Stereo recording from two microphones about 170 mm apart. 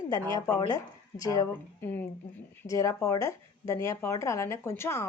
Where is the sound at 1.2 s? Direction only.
20° left (ahead or behind).